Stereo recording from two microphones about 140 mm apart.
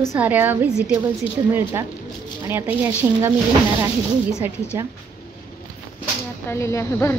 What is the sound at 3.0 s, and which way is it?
Speech, 15° right (ahead or behind).